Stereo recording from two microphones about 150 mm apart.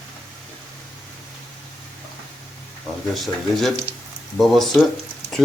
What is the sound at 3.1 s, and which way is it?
Speech, centre (ahead or behind).